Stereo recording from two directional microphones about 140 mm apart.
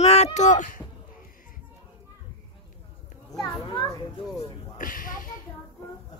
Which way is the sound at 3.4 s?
30° left (ahead or behind).